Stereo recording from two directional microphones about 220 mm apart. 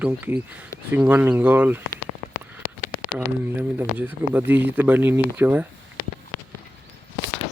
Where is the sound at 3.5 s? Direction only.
10° right (ahead or behind).